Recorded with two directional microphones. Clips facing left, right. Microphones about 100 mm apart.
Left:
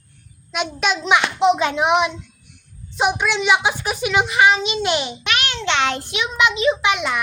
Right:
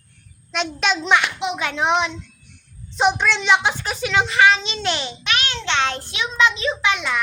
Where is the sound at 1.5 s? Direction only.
20° left (ahead or behind).